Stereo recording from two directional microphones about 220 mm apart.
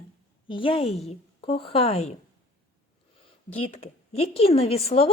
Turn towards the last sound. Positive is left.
turn(degrees=25)  # may be behind; listen again after turning